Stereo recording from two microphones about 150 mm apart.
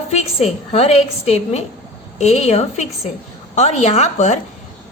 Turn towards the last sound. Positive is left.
turn(degrees=50)  # may be behind; listen again after turning